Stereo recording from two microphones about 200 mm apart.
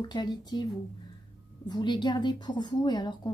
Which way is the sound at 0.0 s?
20° left (ahead or behind).